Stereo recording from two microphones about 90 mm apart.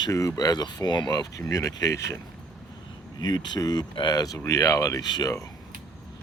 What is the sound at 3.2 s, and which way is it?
Speech, 50° left (ahead or behind).